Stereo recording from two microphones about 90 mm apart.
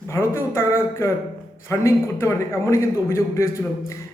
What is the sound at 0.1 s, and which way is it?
A man's voice, 30° left (ahead or behind).